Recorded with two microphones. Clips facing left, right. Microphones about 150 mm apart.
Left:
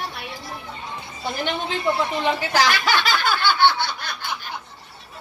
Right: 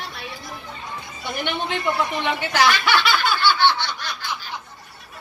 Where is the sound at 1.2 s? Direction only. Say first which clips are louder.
Left 2 dB; 35° left (ahead or behind).